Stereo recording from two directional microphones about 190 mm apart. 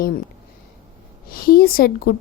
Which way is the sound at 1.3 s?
50° left (ahead or behind).